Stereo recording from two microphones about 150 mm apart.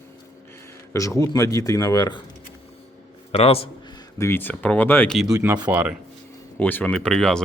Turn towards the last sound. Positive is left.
turn(degrees=5)  # may be behind; listen again after turning